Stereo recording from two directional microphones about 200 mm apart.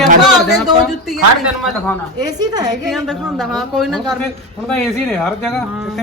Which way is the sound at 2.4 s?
20° right (ahead or behind).